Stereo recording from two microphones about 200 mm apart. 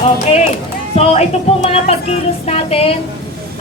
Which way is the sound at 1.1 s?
30° left (ahead or behind).